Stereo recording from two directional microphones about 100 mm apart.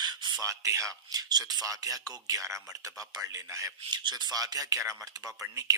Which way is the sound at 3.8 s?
50° right (ahead or behind).